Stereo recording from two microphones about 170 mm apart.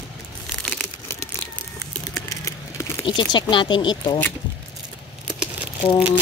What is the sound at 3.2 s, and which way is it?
Speech, 30° left (ahead or behind).